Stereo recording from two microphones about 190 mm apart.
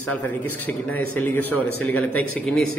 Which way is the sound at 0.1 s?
10° left (ahead or behind).